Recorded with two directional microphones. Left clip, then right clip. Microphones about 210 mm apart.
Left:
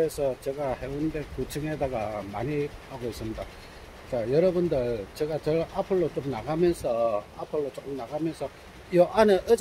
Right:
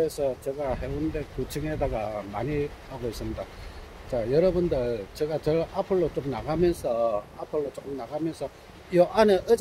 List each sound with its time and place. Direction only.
0.0 s speech: 5° right (ahead or behind)
4.1 s speech: 5° right (ahead or behind)